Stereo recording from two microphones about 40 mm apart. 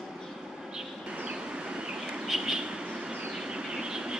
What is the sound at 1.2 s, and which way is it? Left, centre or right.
Train, right.